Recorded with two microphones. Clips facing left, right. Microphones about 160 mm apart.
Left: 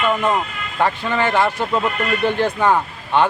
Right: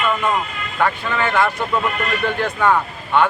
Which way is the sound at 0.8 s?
30° left (ahead or behind).